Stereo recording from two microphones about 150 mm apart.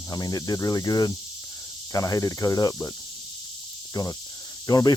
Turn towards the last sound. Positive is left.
turn(degrees=25)  # may be behind; listen again after turning